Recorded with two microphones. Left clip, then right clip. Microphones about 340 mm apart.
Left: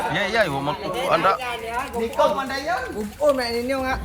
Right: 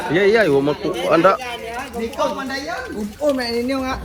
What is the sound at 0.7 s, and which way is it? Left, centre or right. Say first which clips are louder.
Speech: right 4 dB; left.